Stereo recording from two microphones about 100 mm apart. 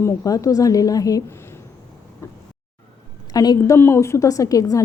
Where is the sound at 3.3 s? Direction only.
40° left (ahead or behind).